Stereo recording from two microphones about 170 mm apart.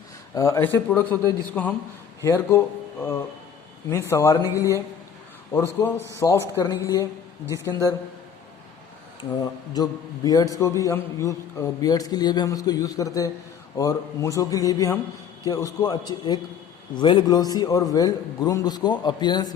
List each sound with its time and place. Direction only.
0.3 s a man's voice: 15° left (ahead or behind)
3.8 s a man's voice: 15° left (ahead or behind)
9.4 s a man's voice: 25° left (ahead or behind)